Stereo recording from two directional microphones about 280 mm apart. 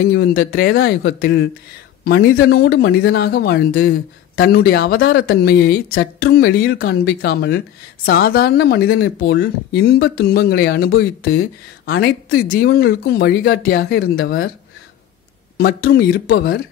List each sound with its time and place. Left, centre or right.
0.0 s speech: left
15.5 s speech: left